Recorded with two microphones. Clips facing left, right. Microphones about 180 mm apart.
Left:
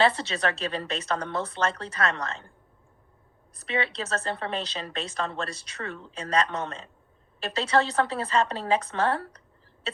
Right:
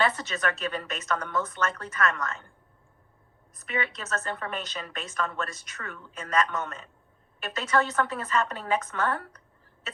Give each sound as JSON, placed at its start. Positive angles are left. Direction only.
{"t": 0.0, "sound": "speech", "side_deg": 30}
{"t": 3.5, "sound": "speech", "side_deg": 30}